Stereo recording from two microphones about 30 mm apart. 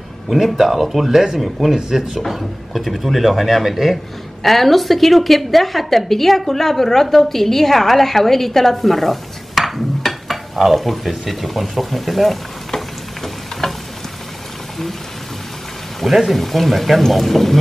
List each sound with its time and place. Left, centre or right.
0.3 s a woman's voice: centre
1.8 s speech: centre
2.1 s a woman's voice: centre
4.4 s a woman's voice: centre
12.7 s a sound: centre
16.3 s a woman's voice: centre